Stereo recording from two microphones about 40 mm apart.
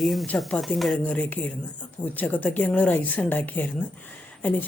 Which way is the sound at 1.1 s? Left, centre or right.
Left.